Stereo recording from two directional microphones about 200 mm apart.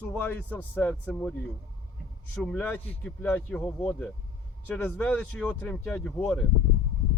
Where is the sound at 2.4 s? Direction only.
10° left (ahead or behind).